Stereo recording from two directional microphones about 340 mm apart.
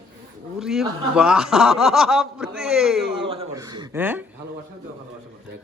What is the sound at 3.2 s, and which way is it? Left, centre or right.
Speech, centre.